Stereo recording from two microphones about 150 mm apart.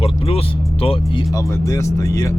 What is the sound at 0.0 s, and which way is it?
Speech, 40° left (ahead or behind).